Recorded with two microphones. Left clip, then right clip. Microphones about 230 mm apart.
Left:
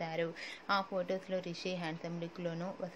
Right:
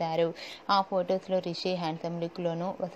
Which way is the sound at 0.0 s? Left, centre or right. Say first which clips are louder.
Right 9 dB; centre.